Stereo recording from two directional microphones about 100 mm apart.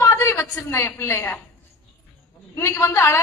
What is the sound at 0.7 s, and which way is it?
Speech, 25° left (ahead or behind).